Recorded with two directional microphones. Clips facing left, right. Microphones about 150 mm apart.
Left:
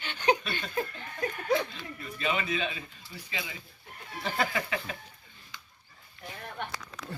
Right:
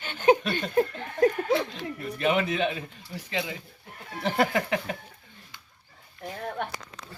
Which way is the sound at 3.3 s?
55° right (ahead or behind).